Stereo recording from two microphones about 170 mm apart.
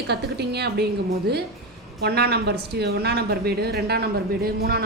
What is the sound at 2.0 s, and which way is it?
A woman's voice, 70° right (ahead or behind).